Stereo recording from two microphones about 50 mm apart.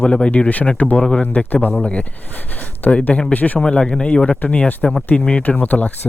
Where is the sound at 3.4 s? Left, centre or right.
Left.